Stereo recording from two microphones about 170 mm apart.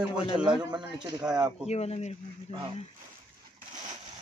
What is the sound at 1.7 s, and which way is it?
Speech, 40° left (ahead or behind).